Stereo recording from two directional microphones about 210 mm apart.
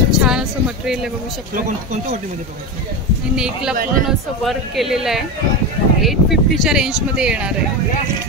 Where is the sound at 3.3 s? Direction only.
5° right (ahead or behind).